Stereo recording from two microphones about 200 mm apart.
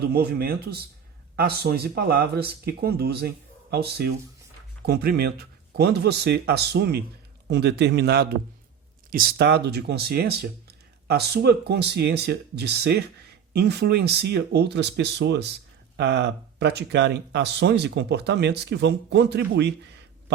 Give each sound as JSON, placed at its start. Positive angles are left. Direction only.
{"t": 0.0, "sound": "speech", "side_deg": -50}